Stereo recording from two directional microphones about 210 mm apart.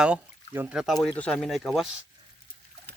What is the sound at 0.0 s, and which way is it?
Speech, 5° right (ahead or behind).